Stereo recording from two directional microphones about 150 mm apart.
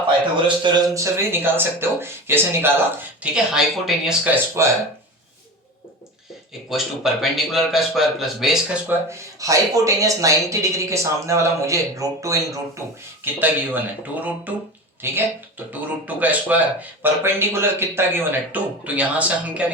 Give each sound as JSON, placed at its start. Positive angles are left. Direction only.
{"t": 0.9, "sound": "speech", "side_deg": -15}
{"t": 3.3, "sound": "speech", "side_deg": -5}
{"t": 6.7, "sound": "a man's voice", "side_deg": 0}
{"t": 8.9, "sound": "speech", "side_deg": -20}
{"t": 13.2, "sound": "speech", "side_deg": -10}